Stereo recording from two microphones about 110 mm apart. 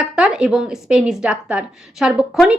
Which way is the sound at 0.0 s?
5° right (ahead or behind).